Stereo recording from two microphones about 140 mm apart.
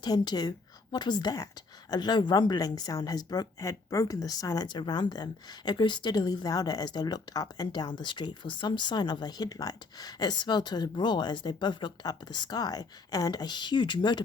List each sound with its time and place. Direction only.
0.0 s a woman's voice: 30° left (ahead or behind)